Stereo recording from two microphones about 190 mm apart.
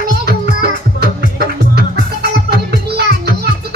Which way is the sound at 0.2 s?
55° right (ahead or behind).